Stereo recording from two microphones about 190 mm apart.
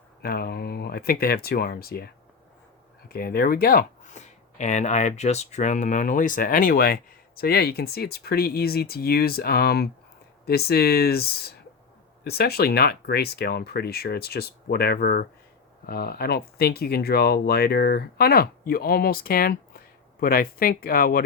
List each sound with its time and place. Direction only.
0.2 s speech: 55° left (ahead or behind)
3.1 s speech: 50° left (ahead or behind)